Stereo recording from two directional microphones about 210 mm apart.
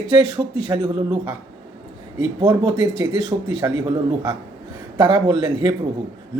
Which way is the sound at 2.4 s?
20° right (ahead or behind).